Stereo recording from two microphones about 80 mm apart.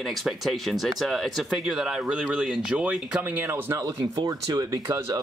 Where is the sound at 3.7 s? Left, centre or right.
Right.